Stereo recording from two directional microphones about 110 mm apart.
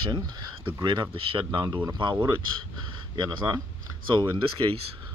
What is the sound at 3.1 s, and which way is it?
Speech, 35° right (ahead or behind).